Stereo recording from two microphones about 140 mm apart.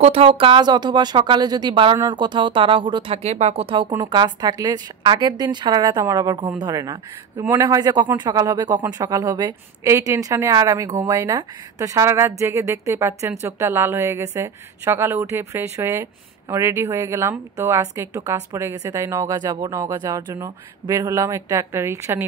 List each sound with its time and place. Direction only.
0.0 s a woman's voice: 45° right (ahead or behind); by 22.2 s 20° right (ahead or behind)